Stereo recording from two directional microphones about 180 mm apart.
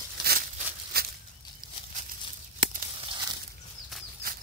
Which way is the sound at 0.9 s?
60° right (ahead or behind).